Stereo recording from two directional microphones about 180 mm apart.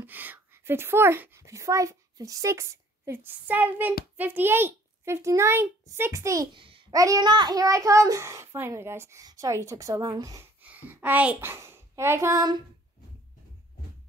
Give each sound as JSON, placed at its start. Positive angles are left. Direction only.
{"t": 0.0, "sound": "a child's voice", "side_deg": -10}
{"t": 10.6, "sound": "a child's voice", "side_deg": -10}